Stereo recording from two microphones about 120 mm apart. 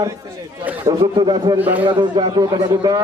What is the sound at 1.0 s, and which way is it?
Speech, 40° right (ahead or behind).